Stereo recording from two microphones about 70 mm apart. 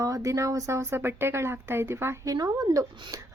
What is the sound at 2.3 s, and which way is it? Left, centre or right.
Speech, right.